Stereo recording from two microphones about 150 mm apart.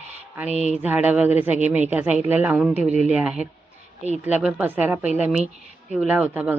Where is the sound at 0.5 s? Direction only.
50° right (ahead or behind).